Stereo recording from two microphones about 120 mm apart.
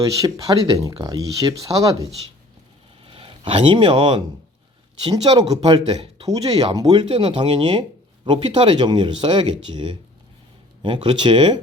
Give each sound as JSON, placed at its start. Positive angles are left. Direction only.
{"t": 0.0, "sound": "speech", "side_deg": -30}
{"t": 3.0, "sound": "speech", "side_deg": -50}
{"t": 7.1, "sound": "speech", "side_deg": -60}
{"t": 7.3, "sound": "speech", "side_deg": -45}